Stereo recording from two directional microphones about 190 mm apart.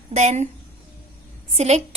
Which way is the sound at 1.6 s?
35° right (ahead or behind).